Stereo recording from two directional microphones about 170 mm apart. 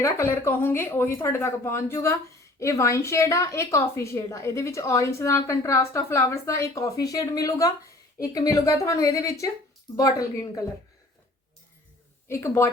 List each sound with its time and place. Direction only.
0.0 s a woman's voice: 15° left (ahead or behind)
12.3 s speech: 15° left (ahead or behind)